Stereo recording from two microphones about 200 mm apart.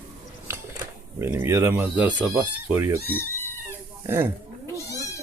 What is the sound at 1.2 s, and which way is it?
Speech, 15° right (ahead or behind).